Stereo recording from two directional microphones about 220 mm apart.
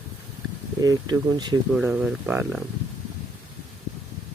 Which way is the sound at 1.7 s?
5° right (ahead or behind).